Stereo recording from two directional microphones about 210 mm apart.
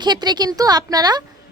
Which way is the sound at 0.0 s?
20° right (ahead or behind).